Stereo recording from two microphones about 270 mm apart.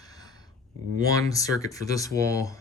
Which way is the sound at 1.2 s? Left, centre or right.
Centre.